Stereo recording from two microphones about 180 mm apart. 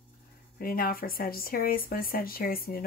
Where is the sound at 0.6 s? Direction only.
55° left (ahead or behind).